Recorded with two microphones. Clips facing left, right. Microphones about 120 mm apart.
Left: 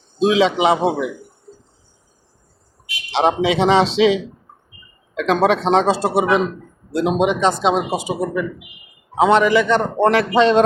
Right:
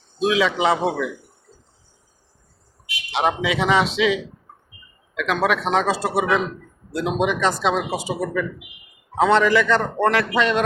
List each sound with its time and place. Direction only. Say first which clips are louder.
0.2 s speech: left 4 dB; 25° left (ahead or behind)
3.1 s speech: left 5 dB; 30° left (ahead or behind)